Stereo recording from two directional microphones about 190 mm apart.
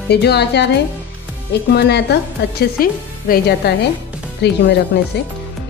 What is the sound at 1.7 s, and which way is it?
A woman's voice, 60° left (ahead or behind).